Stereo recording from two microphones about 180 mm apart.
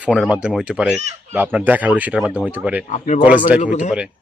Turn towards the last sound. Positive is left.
turn(degrees=45)  # may be behind; listen again after turning